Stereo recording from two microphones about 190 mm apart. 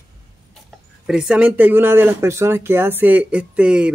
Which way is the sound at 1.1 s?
5° right (ahead or behind).